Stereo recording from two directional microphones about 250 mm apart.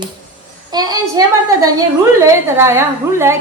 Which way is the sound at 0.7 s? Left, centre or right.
Centre.